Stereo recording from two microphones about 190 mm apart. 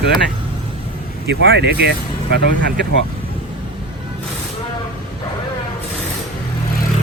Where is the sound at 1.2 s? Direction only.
60° right (ahead or behind).